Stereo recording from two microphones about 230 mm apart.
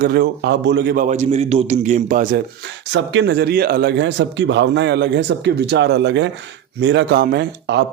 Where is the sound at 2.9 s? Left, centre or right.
Right.